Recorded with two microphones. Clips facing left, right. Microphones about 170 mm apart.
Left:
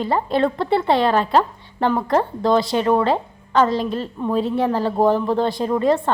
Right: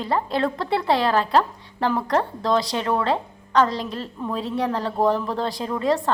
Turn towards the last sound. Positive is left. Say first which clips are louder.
# left 4 dB
turn(degrees=0)  # may be behind; listen again after turning